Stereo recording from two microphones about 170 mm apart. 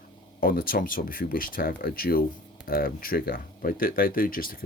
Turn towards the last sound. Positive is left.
turn(degrees=55)  # may be behind; listen again after turning